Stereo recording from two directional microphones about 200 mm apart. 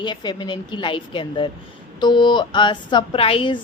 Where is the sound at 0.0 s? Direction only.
20° left (ahead or behind).